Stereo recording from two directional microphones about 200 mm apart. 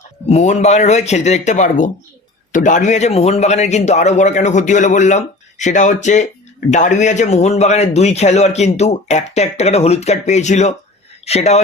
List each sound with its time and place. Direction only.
0.3 s a man's voice: 35° left (ahead or behind)